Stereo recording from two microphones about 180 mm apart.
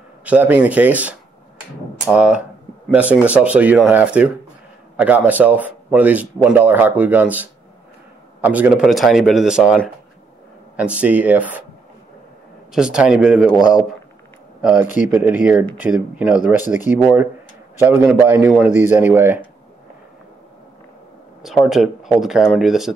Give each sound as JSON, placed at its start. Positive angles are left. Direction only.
{"t": 0.2, "sound": "a man's voice", "side_deg": -10}
{"t": 10.8, "sound": "speech", "side_deg": -5}
{"t": 12.7, "sound": "a man's voice", "side_deg": -5}
{"t": 14.6, "sound": "a man's voice", "side_deg": -5}
{"t": 16.6, "sound": "speech", "side_deg": 45}
{"t": 17.0, "sound": "speech", "side_deg": -10}
{"t": 21.6, "sound": "a man's voice", "side_deg": 0}